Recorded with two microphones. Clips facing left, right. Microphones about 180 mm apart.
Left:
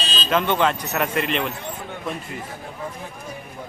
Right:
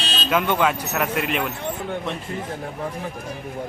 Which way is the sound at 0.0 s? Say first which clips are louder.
Even; 65° right (ahead or behind).